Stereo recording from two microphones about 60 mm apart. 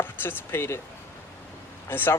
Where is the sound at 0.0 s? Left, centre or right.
Left.